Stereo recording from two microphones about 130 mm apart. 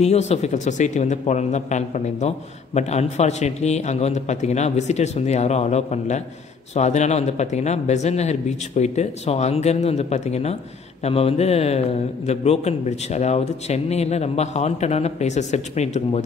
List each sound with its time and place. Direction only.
0.0 s speech: 55° left (ahead or behind)